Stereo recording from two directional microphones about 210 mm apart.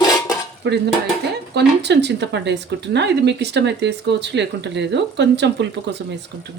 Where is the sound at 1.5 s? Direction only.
55° right (ahead or behind).